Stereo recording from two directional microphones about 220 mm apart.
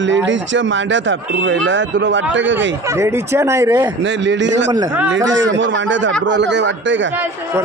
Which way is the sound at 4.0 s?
55° right (ahead or behind).